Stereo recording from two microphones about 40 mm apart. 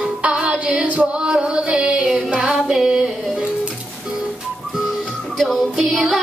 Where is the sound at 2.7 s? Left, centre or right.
Centre.